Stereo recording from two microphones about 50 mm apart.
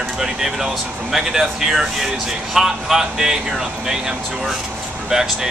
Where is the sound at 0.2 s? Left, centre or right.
Centre.